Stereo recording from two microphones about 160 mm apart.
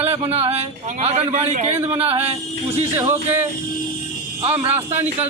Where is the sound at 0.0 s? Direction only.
40° right (ahead or behind).